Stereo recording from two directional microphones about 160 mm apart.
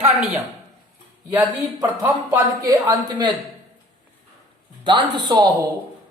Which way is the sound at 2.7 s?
25° right (ahead or behind).